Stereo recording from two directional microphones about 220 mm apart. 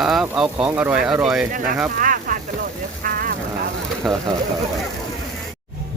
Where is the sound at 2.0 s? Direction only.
40° right (ahead or behind).